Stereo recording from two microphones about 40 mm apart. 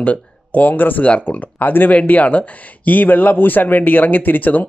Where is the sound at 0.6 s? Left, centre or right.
Left.